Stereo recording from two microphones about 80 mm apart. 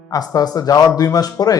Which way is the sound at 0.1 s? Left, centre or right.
Left.